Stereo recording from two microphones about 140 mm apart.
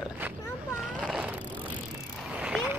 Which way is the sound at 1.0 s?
5° right (ahead or behind).